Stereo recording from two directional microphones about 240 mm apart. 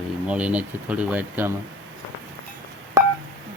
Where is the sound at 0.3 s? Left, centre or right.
Centre.